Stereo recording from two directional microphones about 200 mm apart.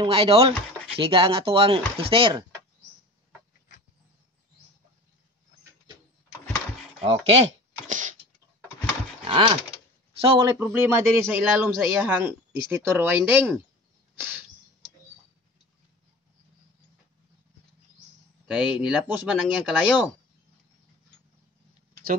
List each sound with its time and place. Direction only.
0.0 s speech: 25° right (ahead or behind)
7.0 s speech: 30° right (ahead or behind)
9.2 s horse: 25° right (ahead or behind)
10.2 s speech: 25° right (ahead or behind)
10.6 s a man's voice: 10° right (ahead or behind)
18.5 s speech: 5° right (ahead or behind)